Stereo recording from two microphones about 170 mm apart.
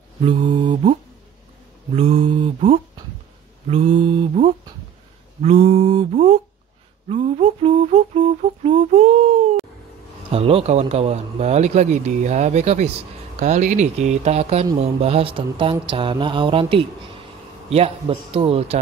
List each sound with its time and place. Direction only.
0.5 s mantra: 30° right (ahead or behind)
2.0 s speech: 35° right (ahead or behind)
5.4 s speech: 40° right (ahead or behind)